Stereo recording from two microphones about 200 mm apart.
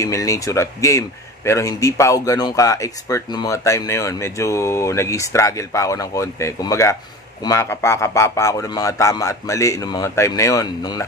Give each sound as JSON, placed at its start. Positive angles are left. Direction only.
{"t": 0.0, "sound": "speech", "side_deg": 15}